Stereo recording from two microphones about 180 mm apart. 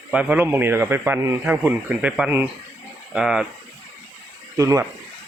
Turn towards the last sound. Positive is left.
turn(degrees=-20)  # may be behind; listen again after turning